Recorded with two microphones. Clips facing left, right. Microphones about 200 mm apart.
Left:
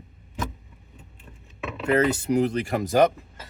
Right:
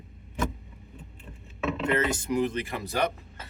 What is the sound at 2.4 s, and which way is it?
Speech, 45° left (ahead or behind).